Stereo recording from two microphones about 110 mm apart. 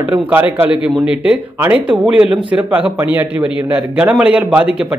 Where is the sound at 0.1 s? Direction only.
15° right (ahead or behind).